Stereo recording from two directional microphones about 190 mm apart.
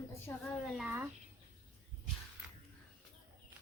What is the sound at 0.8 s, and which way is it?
Speech, 5° right (ahead or behind).